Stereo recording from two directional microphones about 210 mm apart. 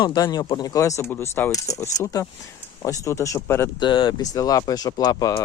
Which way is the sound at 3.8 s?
20° left (ahead or behind).